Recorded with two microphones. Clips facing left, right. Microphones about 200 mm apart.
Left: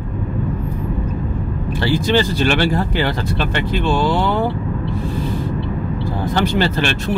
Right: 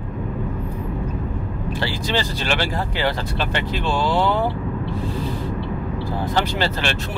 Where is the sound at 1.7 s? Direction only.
50° left (ahead or behind).